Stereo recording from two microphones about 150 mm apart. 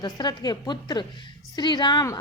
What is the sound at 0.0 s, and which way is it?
A woman's voice, 30° left (ahead or behind).